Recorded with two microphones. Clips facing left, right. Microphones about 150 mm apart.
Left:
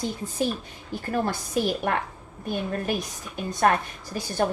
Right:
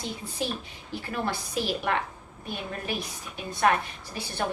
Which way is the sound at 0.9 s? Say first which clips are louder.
Left 4 dB; 45° left (ahead or behind).